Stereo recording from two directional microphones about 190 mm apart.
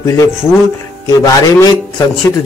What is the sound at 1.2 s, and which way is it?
Speech, 20° left (ahead or behind).